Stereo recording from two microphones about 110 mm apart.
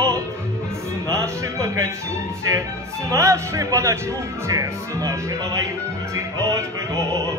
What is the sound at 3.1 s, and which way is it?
Speech, 30° right (ahead or behind).